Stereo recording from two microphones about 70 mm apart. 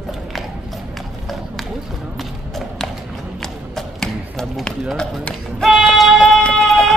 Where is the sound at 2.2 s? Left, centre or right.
Centre.